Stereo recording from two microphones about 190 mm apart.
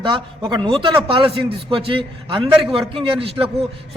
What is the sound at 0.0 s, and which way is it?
A man's voice, 25° right (ahead or behind).